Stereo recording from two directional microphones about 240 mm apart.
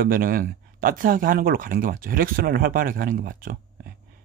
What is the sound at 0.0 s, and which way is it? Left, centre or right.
Speech, right.